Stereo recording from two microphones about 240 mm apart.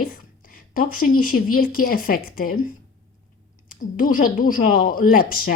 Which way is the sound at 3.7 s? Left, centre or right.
Left.